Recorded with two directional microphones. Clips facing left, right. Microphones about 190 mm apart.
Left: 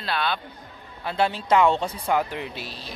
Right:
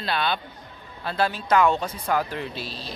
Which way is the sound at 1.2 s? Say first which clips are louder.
Left 1 dB; 25° left (ahead or behind).